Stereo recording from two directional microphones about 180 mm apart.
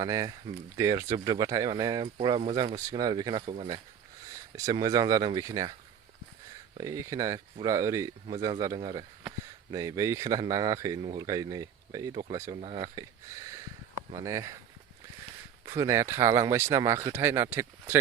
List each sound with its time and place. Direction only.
0.0 s speech: 20° right (ahead or behind)
3.4 s speech: 35° right (ahead or behind)
4.5 s speech: 20° right (ahead or behind)
6.7 s speech: 20° right (ahead or behind)
15.6 s speech: 15° right (ahead or behind)